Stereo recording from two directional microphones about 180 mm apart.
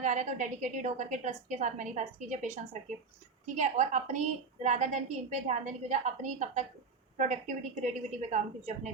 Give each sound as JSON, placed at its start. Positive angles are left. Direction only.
{"t": 0.0, "sound": "a woman's voice", "side_deg": -45}